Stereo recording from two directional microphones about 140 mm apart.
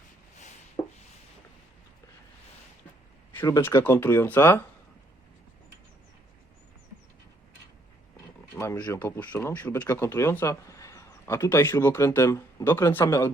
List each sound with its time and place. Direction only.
3.3 s speech: 20° left (ahead or behind)
8.5 s speech: 20° left (ahead or behind)